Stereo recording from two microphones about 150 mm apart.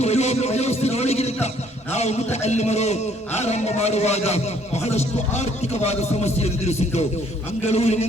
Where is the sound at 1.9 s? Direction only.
45° left (ahead or behind).